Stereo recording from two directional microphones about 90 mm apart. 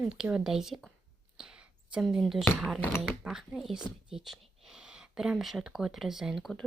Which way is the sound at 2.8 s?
25° left (ahead or behind).